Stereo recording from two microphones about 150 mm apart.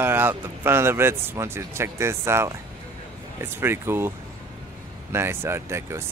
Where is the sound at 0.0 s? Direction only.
15° right (ahead or behind).